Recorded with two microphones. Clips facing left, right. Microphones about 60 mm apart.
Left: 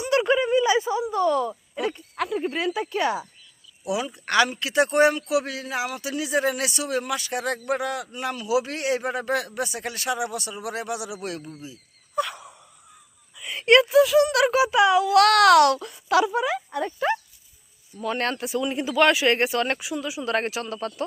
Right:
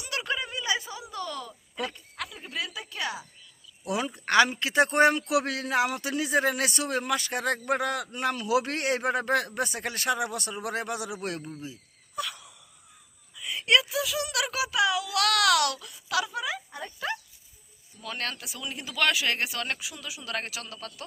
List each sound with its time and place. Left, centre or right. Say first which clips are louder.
0.0 s a sound: left 11 dB; left
2.1 s a child's voice: left 12 dB; left
3.8 s a man's voice: left 2 dB; right
12.1 s wheeze: left 8 dB; left
13.4 s a child's voice: left 7 dB; left